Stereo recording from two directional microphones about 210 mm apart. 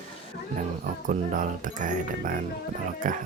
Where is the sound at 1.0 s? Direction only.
40° right (ahead or behind).